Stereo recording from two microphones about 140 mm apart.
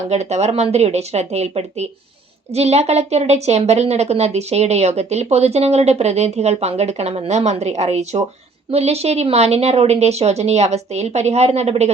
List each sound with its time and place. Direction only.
0.1 s a woman's voice: 50° right (ahead or behind)